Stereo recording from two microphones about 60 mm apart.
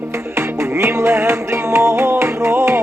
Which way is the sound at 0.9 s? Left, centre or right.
Right.